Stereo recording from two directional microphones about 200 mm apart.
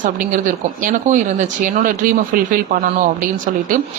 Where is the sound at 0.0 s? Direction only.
40° right (ahead or behind).